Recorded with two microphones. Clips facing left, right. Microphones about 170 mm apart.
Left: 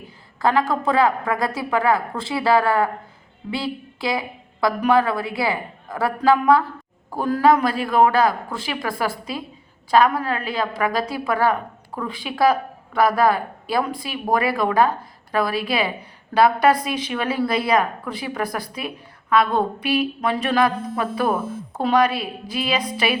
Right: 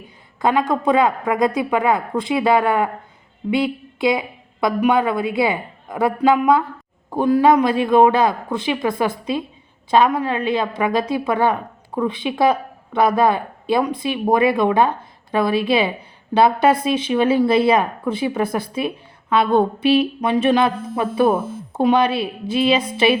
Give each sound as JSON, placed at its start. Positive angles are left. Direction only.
{"t": 0.4, "sound": "a woman's voice", "side_deg": -20}